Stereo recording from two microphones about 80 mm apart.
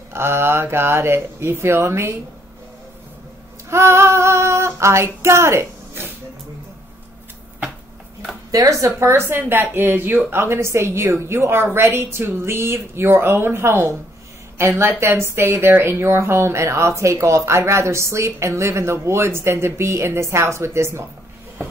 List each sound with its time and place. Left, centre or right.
0.1 s a woman's voice: right
3.7 s female singing: right
8.5 s a woman's voice: right